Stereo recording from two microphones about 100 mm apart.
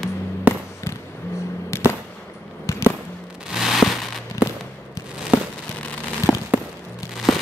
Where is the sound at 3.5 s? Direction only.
5° right (ahead or behind).